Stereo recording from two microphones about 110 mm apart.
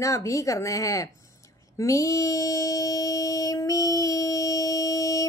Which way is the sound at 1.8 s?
30° left (ahead or behind).